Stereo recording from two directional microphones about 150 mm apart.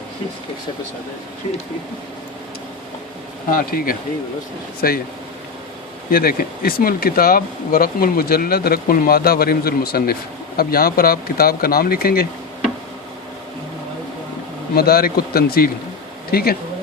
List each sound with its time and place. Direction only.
3.5 s speech: 75° left (ahead or behind)
6.1 s speech: 75° left (ahead or behind)
14.8 s speech: 90° left